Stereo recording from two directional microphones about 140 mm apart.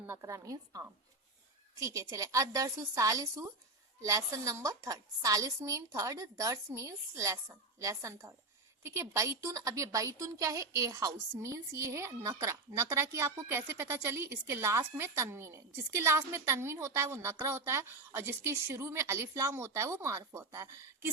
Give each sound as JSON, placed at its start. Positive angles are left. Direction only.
{"t": 0.0, "sound": "a woman's voice", "side_deg": -20}